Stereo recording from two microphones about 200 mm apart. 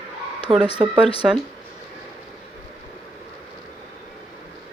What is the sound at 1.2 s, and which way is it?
Speech, 5° right (ahead or behind).